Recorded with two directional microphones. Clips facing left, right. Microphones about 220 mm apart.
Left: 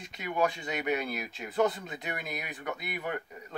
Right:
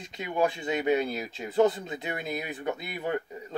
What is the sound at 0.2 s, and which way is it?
Speech, 25° right (ahead or behind).